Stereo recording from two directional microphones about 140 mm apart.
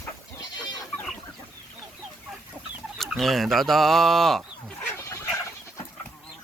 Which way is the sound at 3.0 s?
Centre (ahead or behind).